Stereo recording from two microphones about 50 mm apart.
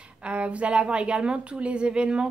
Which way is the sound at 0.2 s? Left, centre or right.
Right.